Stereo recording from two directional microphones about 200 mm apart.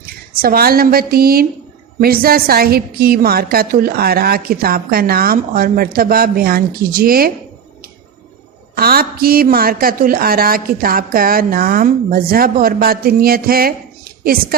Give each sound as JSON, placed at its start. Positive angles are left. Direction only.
{"t": 0.0, "sound": "a woman's voice", "side_deg": -50}
{"t": 8.7, "sound": "a woman's voice", "side_deg": -50}